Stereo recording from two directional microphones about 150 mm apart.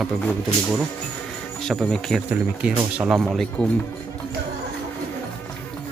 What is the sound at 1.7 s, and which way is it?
A man's voice, centre (ahead or behind).